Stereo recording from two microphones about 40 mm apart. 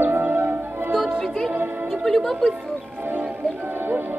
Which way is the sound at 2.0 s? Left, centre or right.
Centre.